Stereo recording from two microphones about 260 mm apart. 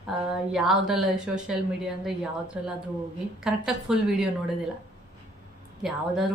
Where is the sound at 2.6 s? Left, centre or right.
Centre.